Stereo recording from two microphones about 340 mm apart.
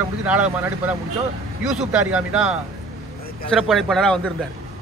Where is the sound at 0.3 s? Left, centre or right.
Centre.